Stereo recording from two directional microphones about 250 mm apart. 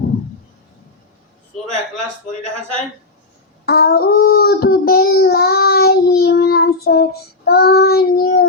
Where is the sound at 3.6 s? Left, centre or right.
Left.